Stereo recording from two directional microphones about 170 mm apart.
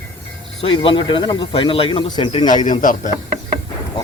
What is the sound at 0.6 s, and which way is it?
Speech, 30° left (ahead or behind).